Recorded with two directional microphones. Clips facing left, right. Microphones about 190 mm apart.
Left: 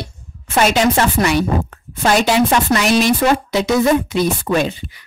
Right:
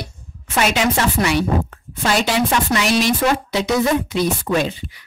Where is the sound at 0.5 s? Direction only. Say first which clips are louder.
Left 4 dB; 45° left (ahead or behind).